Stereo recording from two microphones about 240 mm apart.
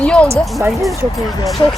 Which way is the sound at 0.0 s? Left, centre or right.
Centre.